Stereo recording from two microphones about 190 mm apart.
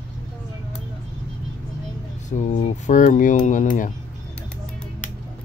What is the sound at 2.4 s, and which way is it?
Speech, 40° left (ahead or behind).